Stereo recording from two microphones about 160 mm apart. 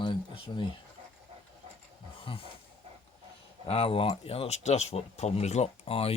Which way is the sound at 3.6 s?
35° left (ahead or behind).